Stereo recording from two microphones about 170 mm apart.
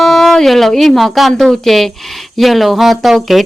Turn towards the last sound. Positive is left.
turn(degrees=0)  # may be behind; listen again after turning